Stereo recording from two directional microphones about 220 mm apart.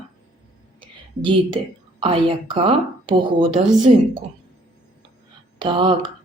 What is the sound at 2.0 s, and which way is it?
Speech, 25° right (ahead or behind).